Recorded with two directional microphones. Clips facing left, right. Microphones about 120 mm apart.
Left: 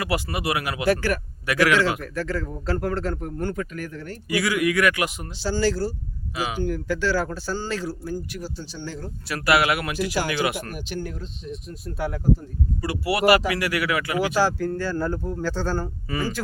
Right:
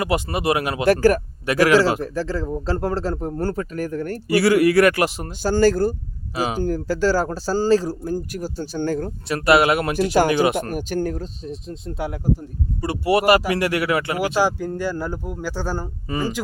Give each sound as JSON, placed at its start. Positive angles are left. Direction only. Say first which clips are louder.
{"t": 0.0, "sound": "speech", "louder": "right 4 dB", "side_deg": -25}
{"t": 0.9, "sound": "speech", "louder": "right 9 dB", "side_deg": -40}
{"t": 5.4, "sound": "speech", "louder": "right 6 dB", "side_deg": -50}
{"t": 6.3, "sound": "speech", "louder": "right 4 dB", "side_deg": -40}
{"t": 9.3, "sound": "speech", "louder": "right 5 dB", "side_deg": -25}
{"t": 10.7, "sound": "speech", "louder": "right 8 dB", "side_deg": -45}
{"t": 14.3, "sound": "speech", "louder": "right 2 dB", "side_deg": -15}